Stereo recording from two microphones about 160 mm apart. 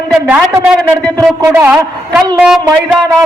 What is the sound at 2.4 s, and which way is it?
Speech, centre (ahead or behind).